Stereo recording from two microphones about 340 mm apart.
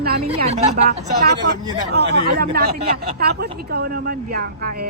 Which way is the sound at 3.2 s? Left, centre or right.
Right.